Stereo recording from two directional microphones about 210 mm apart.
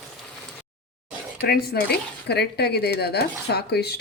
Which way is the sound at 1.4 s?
50° left (ahead or behind).